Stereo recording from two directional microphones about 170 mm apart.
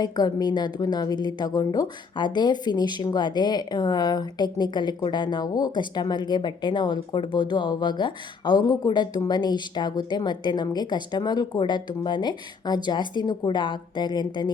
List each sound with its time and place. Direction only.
0.0 s a woman's voice: 25° left (ahead or behind)